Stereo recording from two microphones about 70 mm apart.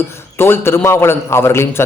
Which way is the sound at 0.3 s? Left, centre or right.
Left.